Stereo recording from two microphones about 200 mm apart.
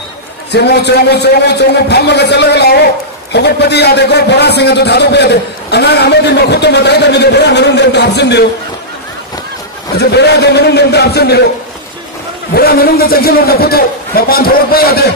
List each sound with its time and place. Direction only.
0.5 s a man's voice: 55° left (ahead or behind)
9.9 s a man's voice: 55° left (ahead or behind)
12.5 s a man's voice: 50° left (ahead or behind)